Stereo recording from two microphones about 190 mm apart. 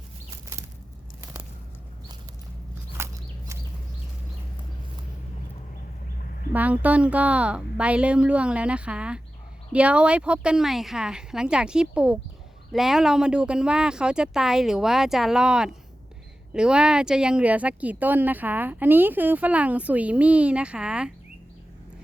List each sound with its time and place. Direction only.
3.0 s bird: 15° right (ahead or behind)
6.5 s speech: 10° right (ahead or behind)